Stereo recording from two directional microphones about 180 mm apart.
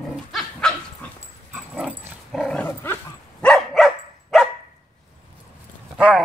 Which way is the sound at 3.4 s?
Centre (ahead or behind).